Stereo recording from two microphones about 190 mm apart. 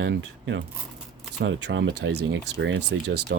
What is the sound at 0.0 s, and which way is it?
Speech, 70° right (ahead or behind).